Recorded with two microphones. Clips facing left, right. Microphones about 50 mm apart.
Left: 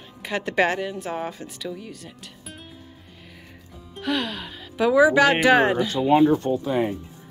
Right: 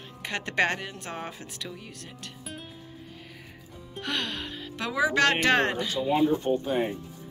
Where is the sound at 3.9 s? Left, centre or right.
Centre.